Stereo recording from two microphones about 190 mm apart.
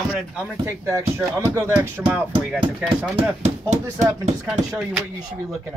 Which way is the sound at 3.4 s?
35° right (ahead or behind).